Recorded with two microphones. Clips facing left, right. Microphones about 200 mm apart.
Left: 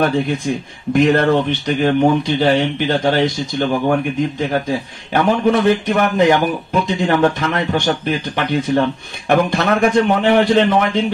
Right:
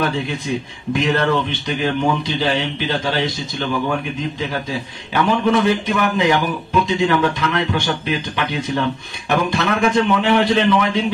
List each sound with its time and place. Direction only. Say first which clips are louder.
0.0 s a man's voice: left 5 dB; 50° left (ahead or behind)